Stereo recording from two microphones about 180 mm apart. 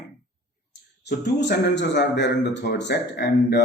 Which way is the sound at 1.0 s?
65° left (ahead or behind).